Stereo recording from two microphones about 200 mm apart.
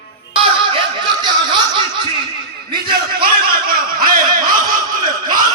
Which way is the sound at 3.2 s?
50° right (ahead or behind).